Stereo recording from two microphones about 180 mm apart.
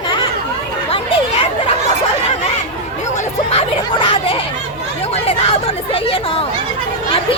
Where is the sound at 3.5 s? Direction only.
30° left (ahead or behind).